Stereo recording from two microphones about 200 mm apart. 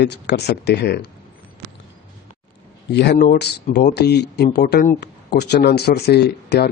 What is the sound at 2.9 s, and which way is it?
Speech, 55° left (ahead or behind).